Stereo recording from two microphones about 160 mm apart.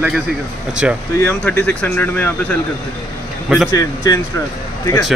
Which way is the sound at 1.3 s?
10° left (ahead or behind).